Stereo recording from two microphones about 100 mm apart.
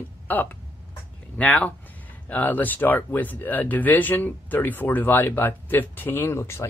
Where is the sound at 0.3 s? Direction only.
20° left (ahead or behind).